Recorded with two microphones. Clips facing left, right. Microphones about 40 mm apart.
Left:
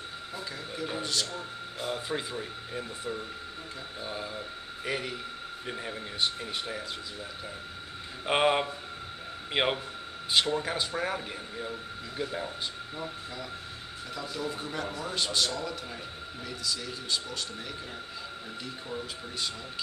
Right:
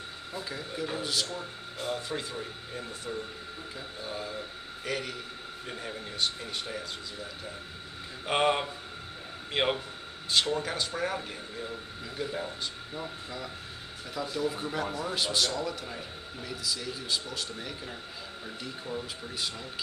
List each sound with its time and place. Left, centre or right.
0.3 s speech: centre
1.3 s speech: centre
8.3 s speech: centre